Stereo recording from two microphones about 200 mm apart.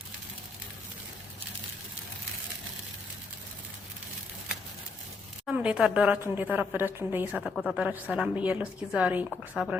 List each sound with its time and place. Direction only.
5.5 s a woman's voice: 5° right (ahead or behind)
7.5 s a woman's voice: centre (ahead or behind)